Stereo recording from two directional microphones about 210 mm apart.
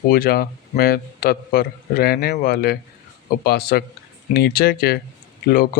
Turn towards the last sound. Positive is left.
turn(degrees=45)  # may be behind; listen again after turning